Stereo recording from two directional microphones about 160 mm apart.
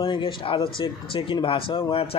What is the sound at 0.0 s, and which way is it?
Speech, 30° left (ahead or behind).